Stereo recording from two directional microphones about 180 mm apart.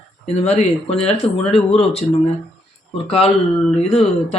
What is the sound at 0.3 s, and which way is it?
Speech, 35° left (ahead or behind).